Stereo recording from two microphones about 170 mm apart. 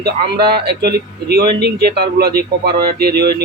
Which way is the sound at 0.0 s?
70° right (ahead or behind).